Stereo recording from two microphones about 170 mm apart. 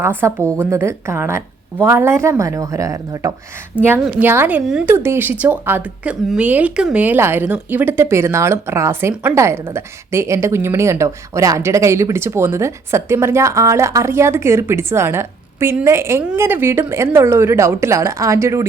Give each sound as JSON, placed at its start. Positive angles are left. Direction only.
{"t": 0.0, "sound": "a woman's voice", "side_deg": -15}